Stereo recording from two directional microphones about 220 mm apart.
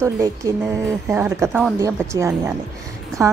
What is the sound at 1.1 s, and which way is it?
A woman's voice, 10° right (ahead or behind).